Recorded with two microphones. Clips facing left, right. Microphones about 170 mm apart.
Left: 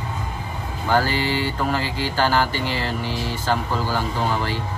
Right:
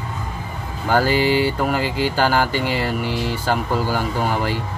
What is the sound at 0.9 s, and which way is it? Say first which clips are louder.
Speech: right 4 dB; 15° right (ahead or behind).